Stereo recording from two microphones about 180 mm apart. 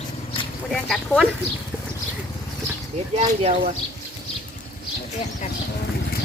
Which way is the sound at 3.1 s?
35° right (ahead or behind).